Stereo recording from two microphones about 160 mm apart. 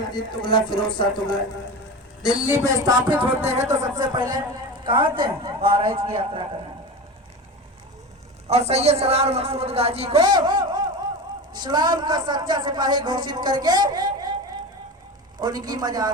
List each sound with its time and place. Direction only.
0.0 s speech: 30° left (ahead or behind)
2.2 s speech: 10° right (ahead or behind)
4.8 s a man's voice: 30° right (ahead or behind)
8.4 s a man's voice: 40° right (ahead or behind)
10.2 s a man's voice: 25° right (ahead or behind)
15.4 s a man's voice: 25° right (ahead or behind)